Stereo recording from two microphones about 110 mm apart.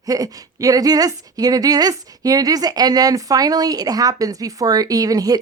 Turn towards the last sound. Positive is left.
turn(degrees=-35)  # may be behind; listen again after turning